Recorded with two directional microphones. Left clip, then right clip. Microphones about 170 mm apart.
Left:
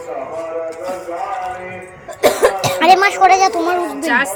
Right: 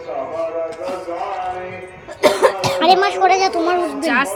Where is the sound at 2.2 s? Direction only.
15° right (ahead or behind).